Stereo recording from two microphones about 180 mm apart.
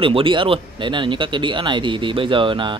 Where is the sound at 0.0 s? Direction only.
30° right (ahead or behind).